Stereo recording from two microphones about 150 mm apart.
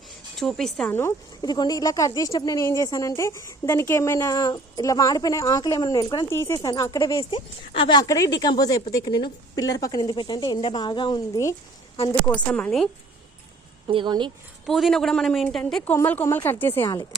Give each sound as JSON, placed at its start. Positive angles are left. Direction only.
{"t": 0.3, "sound": "a man's voice", "side_deg": 5}
{"t": 0.9, "sound": "speech", "side_deg": 15}
{"t": 6.3, "sound": "speech", "side_deg": 20}
{"t": 7.2, "sound": "speech", "side_deg": 35}
{"t": 12.3, "sound": "a woman's voice", "side_deg": 10}
{"t": 13.8, "sound": "speech", "side_deg": -30}
{"t": 14.7, "sound": "a man's voice", "side_deg": 0}